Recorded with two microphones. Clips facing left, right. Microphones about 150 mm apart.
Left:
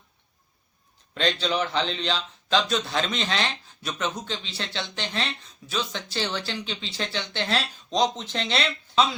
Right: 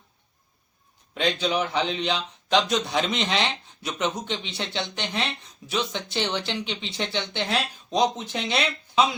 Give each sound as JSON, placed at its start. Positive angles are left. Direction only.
{"t": 1.1, "sound": "a man's voice", "side_deg": -10}